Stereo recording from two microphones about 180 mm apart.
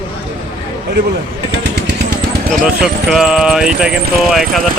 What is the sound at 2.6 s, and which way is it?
Speech, 5° right (ahead or behind).